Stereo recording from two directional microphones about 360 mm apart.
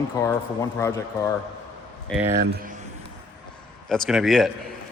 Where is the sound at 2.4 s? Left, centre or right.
Right.